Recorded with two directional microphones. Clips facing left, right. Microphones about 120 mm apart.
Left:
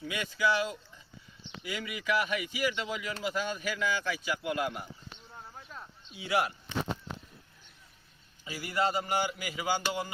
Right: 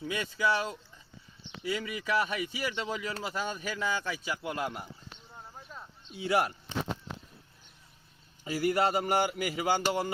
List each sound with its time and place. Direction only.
0.0 s a man's voice: 35° right (ahead or behind)
5.3 s clip-clop: 5° right (ahead or behind)
6.1 s speech: 45° right (ahead or behind)
8.6 s a sound: 55° right (ahead or behind)